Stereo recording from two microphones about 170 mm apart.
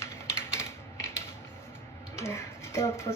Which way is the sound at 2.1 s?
15° left (ahead or behind).